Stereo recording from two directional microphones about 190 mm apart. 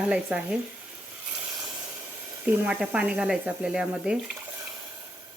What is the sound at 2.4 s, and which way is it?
Speech, 5° right (ahead or behind).